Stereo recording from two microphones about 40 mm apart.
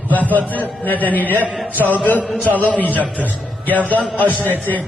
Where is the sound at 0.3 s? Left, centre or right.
Left.